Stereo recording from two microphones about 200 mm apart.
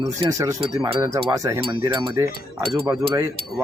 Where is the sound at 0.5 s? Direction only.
25° right (ahead or behind).